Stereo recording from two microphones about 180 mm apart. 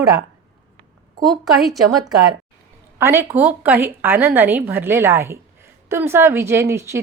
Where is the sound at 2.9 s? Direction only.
15° right (ahead or behind).